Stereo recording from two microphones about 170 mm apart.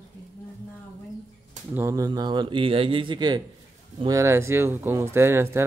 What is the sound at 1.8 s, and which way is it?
A man's voice, 20° right (ahead or behind).